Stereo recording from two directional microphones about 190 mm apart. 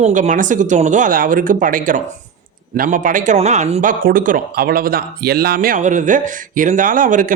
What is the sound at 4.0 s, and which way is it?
A man's voice, 50° right (ahead or behind).